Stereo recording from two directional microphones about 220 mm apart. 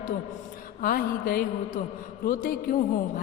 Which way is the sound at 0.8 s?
40° left (ahead or behind).